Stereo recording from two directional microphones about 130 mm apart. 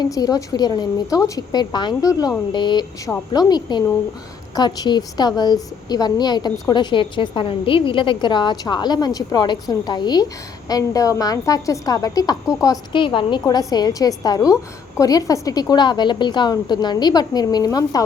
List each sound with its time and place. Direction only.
0.0 s a woman's voice: 30° left (ahead or behind)